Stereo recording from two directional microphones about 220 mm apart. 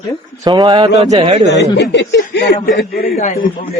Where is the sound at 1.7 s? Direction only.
50° left (ahead or behind).